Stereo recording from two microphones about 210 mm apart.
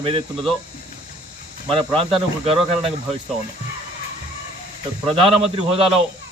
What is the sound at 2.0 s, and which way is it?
Speech, 25° right (ahead or behind).